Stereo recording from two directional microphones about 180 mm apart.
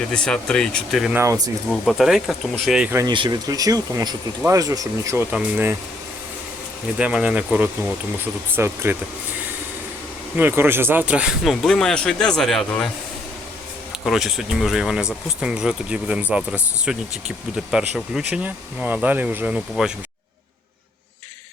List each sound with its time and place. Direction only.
0.1 s speech: 5° left (ahead or behind)
1.1 s speech: 15° right (ahead or behind)
1.7 s speech: centre (ahead or behind)
3.0 s speech: 25° right (ahead or behind)
7.0 s speech: 5° right (ahead or behind)
10.3 s speech: 10° right (ahead or behind)
14.0 s speech: centre (ahead or behind)